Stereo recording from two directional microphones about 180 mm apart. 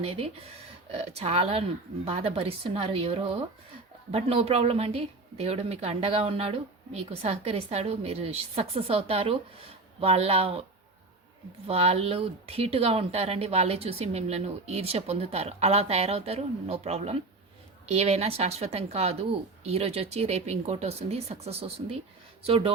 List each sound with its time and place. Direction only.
0.0 s speech: 35° right (ahead or behind)
11.7 s speech: 35° right (ahead or behind)